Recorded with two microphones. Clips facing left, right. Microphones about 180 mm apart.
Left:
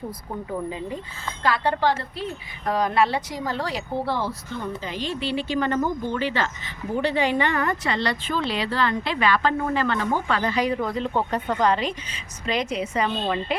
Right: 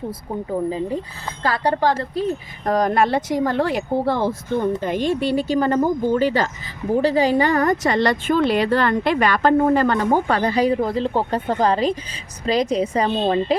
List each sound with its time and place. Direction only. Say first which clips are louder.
1.5 s speech: right 3 dB; 35° right (ahead or behind)